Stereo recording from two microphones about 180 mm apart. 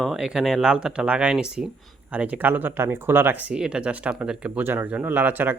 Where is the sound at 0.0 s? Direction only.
5° right (ahead or behind).